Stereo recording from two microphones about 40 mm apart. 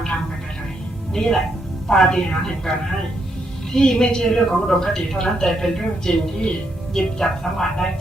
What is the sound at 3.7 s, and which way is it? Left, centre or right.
A woman's voice, left.